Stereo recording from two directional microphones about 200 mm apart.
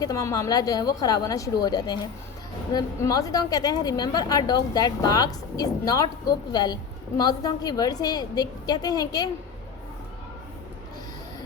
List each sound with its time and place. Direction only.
0.0 s a woman's voice: 15° left (ahead or behind)